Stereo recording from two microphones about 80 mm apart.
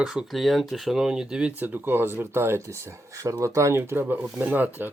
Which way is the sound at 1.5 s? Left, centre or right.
Right.